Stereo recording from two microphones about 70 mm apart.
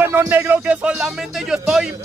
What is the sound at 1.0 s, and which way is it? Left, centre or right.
Speech, centre.